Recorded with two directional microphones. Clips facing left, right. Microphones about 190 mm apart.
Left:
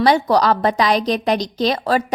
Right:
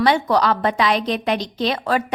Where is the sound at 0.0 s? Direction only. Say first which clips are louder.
Left 2 dB; 35° left (ahead or behind).